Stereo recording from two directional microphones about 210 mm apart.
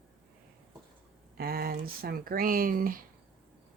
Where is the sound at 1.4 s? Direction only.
45° right (ahead or behind).